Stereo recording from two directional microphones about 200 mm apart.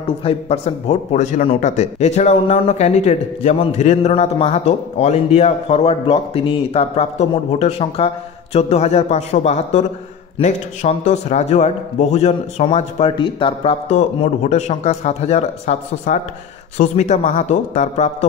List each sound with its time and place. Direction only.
0.0 s speech: 30° left (ahead or behind)